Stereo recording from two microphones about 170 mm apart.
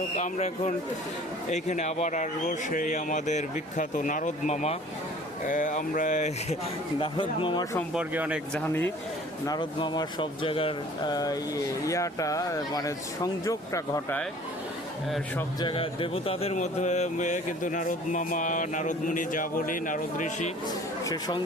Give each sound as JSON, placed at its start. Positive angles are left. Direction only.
{"t": 0.2, "sound": "speech", "side_deg": 45}
{"t": 7.0, "sound": "speech", "side_deg": 30}
{"t": 7.9, "sound": "speech", "side_deg": -5}
{"t": 8.5, "sound": "speech", "side_deg": 10}
{"t": 9.5, "sound": "speech", "side_deg": 25}
{"t": 15.6, "sound": "speech", "side_deg": 30}
{"t": 21.0, "sound": "speech", "side_deg": 20}